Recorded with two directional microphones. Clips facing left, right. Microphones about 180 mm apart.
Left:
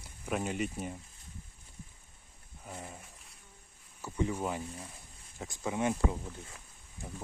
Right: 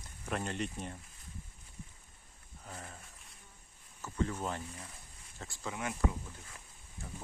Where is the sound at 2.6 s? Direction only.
15° left (ahead or behind).